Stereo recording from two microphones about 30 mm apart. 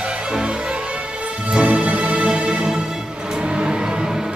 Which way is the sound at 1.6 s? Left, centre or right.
Right.